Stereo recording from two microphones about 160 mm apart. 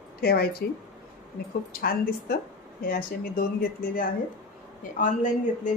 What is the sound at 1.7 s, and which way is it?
A woman's voice, 70° left (ahead or behind).